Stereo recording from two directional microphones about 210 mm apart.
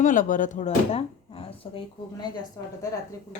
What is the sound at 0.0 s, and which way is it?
Speech, 40° left (ahead or behind).